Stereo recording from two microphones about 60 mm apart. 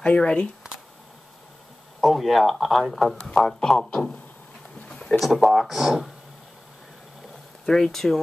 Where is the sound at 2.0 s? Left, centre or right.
Centre.